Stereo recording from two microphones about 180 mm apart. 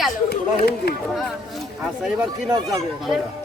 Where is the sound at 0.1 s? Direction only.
60° left (ahead or behind).